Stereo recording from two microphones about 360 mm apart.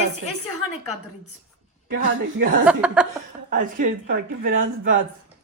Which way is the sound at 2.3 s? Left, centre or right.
Right.